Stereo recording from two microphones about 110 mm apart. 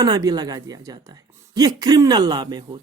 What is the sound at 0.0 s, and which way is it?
Speech, 35° right (ahead or behind).